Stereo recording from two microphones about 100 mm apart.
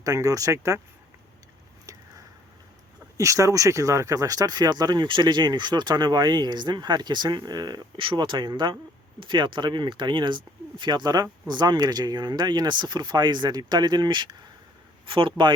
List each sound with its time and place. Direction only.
0.0 s speech: 35° right (ahead or behind)
1.9 s a sound: 35° right (ahead or behind)
3.2 s speech: 30° right (ahead or behind); by 14.3 s 50° right (ahead or behind)
15.0 s speech: 60° right (ahead or behind)